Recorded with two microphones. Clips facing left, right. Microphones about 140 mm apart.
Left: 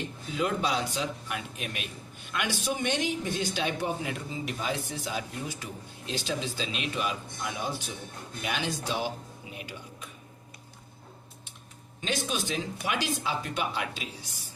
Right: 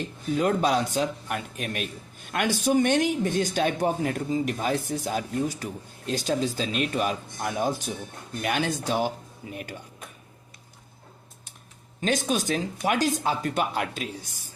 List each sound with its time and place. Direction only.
0.3 s a man's voice: 45° right (ahead or behind)
11.9 s a man's voice: 45° right (ahead or behind)